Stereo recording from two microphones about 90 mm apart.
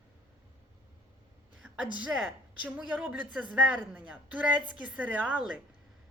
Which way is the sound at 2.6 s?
15° right (ahead or behind).